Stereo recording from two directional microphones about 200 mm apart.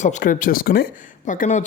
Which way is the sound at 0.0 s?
40° left (ahead or behind).